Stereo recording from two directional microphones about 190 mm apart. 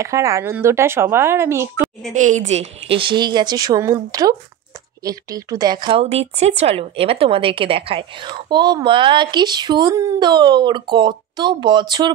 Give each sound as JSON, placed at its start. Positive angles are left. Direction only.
{"t": 0.0, "sound": "speech", "side_deg": -15}
{"t": 2.1, "sound": "speech", "side_deg": -40}